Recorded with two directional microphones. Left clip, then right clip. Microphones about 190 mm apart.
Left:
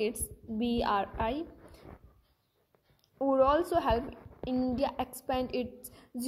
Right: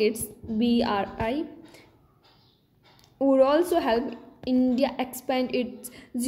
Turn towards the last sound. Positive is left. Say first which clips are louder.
# right 8 dB
turn(degrees=5)  # may be behind; listen again after turning